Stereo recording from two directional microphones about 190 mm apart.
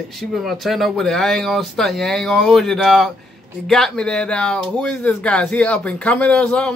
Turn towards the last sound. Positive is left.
turn(degrees=5)  # may be behind; listen again after turning